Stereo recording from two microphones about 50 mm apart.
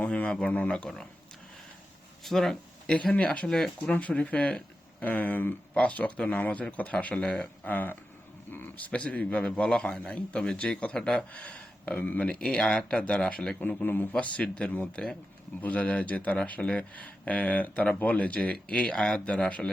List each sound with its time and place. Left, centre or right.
0.0 s speech: left
2.2 s speech: centre
2.8 s speech: centre
3.8 s speech: left
5.7 s speech: left
8.8 s speech: left; by 11.3 s centre
11.3 s speech: left
13.6 s speech: left
14.1 s speech: left
15.6 s speech: left